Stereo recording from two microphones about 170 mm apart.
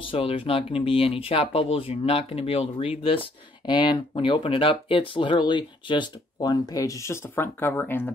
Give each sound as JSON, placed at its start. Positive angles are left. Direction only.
{"t": 0.0, "sound": "speech", "side_deg": 35}